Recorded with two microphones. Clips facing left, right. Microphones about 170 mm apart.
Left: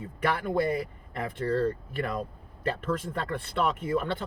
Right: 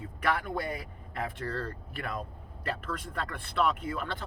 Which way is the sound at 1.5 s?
25° left (ahead or behind).